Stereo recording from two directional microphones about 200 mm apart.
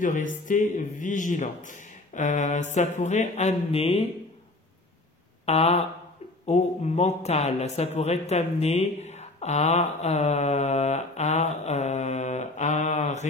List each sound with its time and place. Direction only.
0.0 s a man's voice: 40° left (ahead or behind)
5.4 s a sound: 30° left (ahead or behind)
6.4 s a man's voice: 35° left (ahead or behind)